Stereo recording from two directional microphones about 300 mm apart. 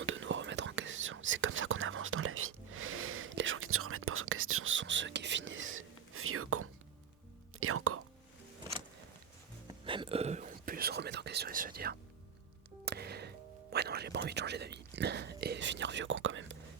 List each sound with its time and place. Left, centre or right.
0.0 s whispering: right
9.8 s whispering: centre
12.8 s music: right